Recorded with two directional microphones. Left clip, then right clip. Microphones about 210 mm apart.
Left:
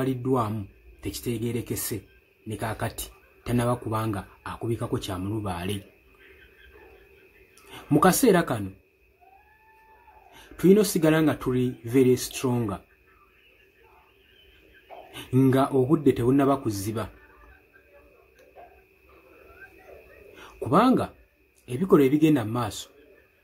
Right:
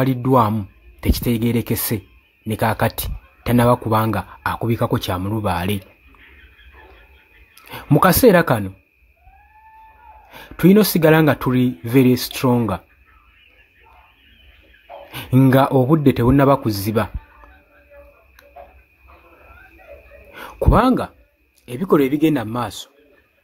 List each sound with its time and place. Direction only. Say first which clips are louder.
0.0 s speech: right 10 dB; 30° right (ahead or behind)
7.7 s speech: right 6 dB; 30° right (ahead or behind)
10.3 s speech: right 5 dB; 30° right (ahead or behind)
15.1 s speech: right 7 dB; 25° right (ahead or behind)
20.3 s speech: right 5 dB; 30° right (ahead or behind)